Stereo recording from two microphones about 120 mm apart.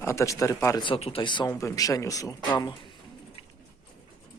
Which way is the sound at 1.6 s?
30° left (ahead or behind).